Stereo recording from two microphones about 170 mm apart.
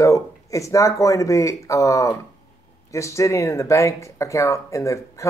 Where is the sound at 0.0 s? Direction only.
20° left (ahead or behind).